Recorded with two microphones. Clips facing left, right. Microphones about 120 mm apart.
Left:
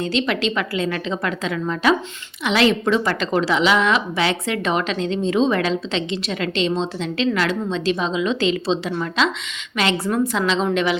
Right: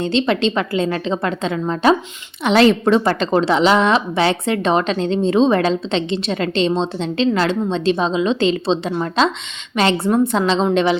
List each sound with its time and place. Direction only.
0.0 s a woman's voice: 30° right (ahead or behind)